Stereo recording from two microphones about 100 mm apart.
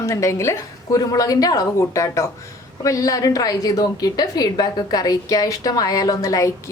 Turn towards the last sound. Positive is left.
turn(degrees=35)  # may be behind; listen again after turning